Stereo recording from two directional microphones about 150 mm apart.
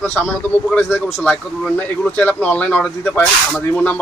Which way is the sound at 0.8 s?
15° left (ahead or behind).